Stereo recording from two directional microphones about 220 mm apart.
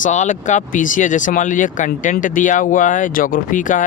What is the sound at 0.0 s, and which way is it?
Speech, 35° left (ahead or behind).